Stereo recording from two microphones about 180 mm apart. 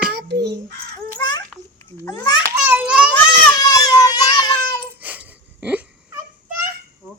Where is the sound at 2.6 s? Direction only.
10° right (ahead or behind).